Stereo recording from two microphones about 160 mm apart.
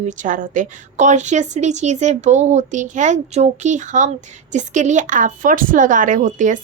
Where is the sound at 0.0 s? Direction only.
50° right (ahead or behind).